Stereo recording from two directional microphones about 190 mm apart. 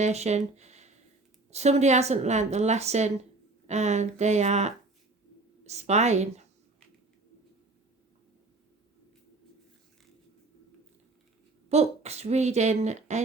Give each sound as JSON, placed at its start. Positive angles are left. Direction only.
{"t": 0.0, "sound": "a woman's voice", "side_deg": -35}
{"t": 11.7, "sound": "a woman's voice", "side_deg": -35}